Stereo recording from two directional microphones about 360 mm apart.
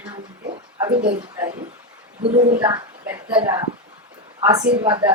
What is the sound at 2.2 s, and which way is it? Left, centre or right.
Speech, centre.